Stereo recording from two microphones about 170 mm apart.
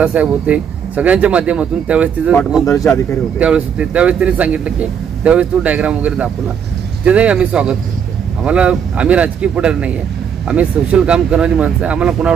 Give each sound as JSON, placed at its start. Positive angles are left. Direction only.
{"t": 0.0, "sound": "speech", "side_deg": -5}
{"t": 2.6, "sound": "speech", "side_deg": 20}
{"t": 3.3, "sound": "speech", "side_deg": -5}